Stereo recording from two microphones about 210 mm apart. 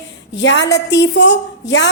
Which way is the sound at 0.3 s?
55° left (ahead or behind).